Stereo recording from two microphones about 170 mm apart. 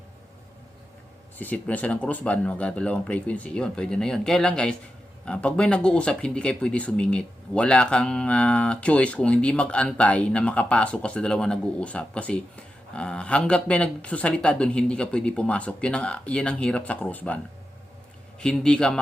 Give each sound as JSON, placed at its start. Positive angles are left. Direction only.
{"t": 1.4, "sound": "speech", "side_deg": 10}